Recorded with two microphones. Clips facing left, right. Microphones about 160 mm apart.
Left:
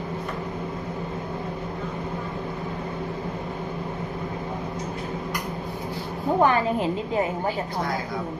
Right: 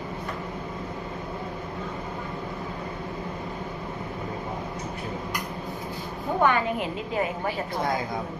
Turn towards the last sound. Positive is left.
turn(degrees=35)  # may be behind; listen again after turning